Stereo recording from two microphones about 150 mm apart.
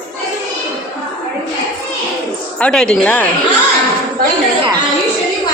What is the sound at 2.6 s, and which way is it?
Speech, 5° left (ahead or behind).